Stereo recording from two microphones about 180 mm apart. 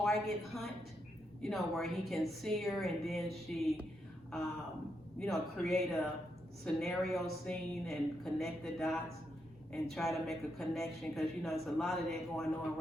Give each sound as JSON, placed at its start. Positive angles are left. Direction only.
{"t": 0.0, "sound": "a woman's voice", "side_deg": 0}
{"t": 5.2, "sound": "a woman's voice", "side_deg": 0}